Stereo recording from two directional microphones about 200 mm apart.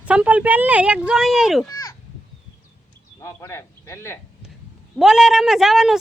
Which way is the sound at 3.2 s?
15° left (ahead or behind).